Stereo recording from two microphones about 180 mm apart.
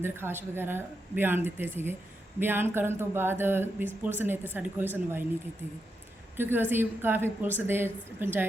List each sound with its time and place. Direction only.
0.0 s speech: 15° right (ahead or behind)
6.3 s speech: 10° right (ahead or behind)